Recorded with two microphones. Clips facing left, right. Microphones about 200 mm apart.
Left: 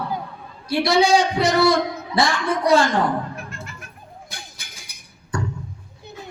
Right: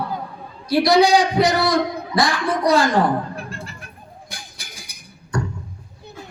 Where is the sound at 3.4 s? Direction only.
30° right (ahead or behind).